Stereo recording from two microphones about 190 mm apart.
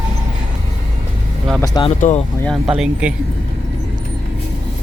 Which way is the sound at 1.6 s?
20° left (ahead or behind).